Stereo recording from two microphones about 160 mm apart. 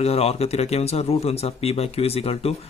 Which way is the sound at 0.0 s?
40° left (ahead or behind).